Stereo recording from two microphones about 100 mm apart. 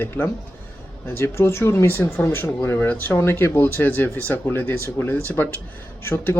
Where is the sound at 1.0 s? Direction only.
25° left (ahead or behind).